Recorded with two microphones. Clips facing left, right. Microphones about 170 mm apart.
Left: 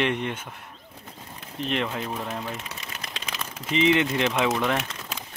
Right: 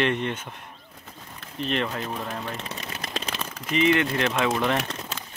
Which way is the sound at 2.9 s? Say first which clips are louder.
Right 5 dB; 45° right (ahead or behind).